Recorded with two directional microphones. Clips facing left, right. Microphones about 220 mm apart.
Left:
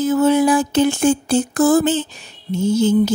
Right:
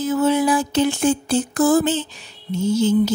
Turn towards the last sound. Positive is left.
turn(degrees=50)  # may be behind; listen again after turning